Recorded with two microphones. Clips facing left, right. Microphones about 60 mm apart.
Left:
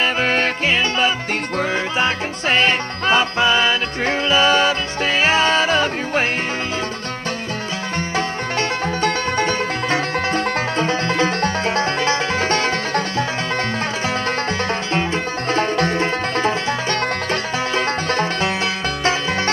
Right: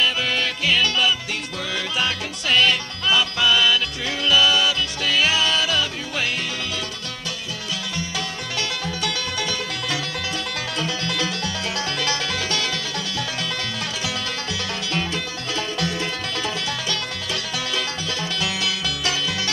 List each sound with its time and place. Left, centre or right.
0.0 s music: left
8.5 s music: left
15.5 s music: left